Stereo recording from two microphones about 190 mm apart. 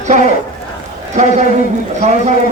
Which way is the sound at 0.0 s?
40° right (ahead or behind).